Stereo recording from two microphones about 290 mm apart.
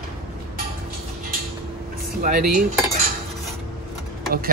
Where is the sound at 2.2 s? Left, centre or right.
Right.